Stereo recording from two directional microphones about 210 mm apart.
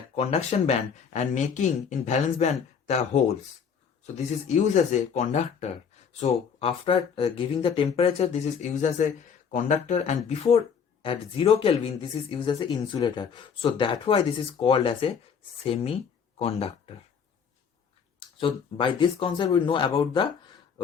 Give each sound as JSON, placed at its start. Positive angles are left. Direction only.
{"t": 0.2, "sound": "speech", "side_deg": 30}
{"t": 18.3, "sound": "speech", "side_deg": 25}